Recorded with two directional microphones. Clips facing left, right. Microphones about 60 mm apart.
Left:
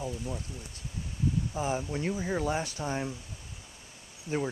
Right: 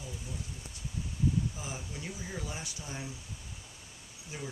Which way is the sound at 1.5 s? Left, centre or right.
Left.